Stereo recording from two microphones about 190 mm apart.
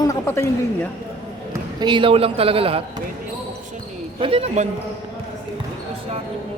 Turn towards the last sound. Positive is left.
turn(degrees=-30)  # may be behind; listen again after turning